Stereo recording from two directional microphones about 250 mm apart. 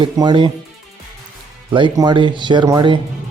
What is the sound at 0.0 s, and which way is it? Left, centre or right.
Speech, centre.